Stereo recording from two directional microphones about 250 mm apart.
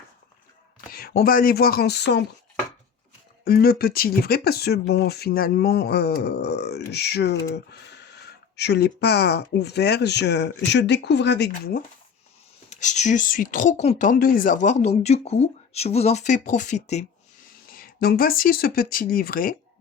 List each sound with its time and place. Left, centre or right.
0.9 s speech: left
3.4 s speech: left
12.7 s speech: left